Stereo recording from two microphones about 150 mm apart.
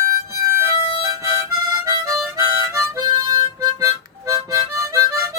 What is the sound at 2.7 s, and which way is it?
Harmonica, 25° right (ahead or behind).